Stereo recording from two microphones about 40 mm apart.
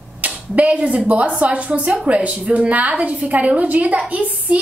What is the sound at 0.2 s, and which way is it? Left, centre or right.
A woman's voice, right.